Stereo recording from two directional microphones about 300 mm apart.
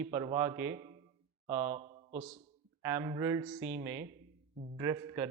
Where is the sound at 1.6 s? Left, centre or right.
Right.